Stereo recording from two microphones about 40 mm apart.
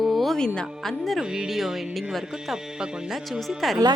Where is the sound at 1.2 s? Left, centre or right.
Centre.